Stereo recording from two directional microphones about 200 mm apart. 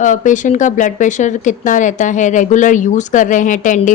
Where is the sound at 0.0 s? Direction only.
40° left (ahead or behind).